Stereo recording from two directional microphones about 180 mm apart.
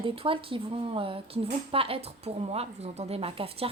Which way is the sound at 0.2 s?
30° right (ahead or behind).